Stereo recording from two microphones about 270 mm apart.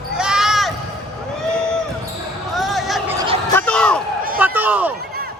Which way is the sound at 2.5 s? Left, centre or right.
Centre.